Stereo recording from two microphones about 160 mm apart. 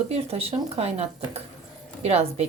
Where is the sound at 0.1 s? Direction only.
40° right (ahead or behind).